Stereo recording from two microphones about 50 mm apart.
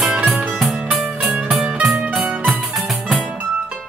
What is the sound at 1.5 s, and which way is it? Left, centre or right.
Music, centre.